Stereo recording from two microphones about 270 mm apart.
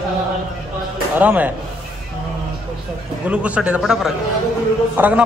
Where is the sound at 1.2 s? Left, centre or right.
Centre.